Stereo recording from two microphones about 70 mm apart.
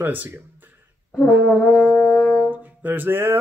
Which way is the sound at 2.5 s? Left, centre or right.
Right.